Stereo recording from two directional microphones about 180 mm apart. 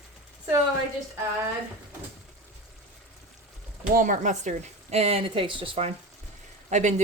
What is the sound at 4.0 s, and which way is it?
Speech, 45° right (ahead or behind).